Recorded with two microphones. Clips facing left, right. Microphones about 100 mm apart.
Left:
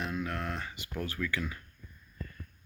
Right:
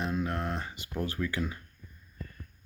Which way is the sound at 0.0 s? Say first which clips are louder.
Right 3 dB; 25° right (ahead or behind).